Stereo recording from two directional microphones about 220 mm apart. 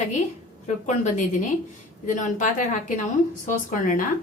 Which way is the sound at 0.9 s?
35° left (ahead or behind).